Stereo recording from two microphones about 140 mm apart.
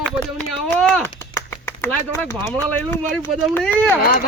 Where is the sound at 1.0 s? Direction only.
15° left (ahead or behind).